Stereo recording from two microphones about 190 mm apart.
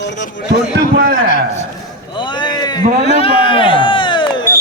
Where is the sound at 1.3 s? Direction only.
45° left (ahead or behind).